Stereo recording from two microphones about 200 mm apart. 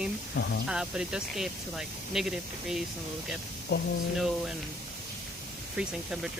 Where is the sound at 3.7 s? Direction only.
55° left (ahead or behind).